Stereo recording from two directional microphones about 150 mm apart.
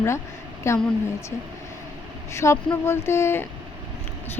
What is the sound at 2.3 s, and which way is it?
Speech, 20° left (ahead or behind).